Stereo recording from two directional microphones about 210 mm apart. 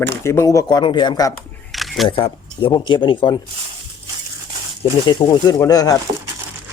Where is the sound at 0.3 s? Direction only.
15° left (ahead or behind).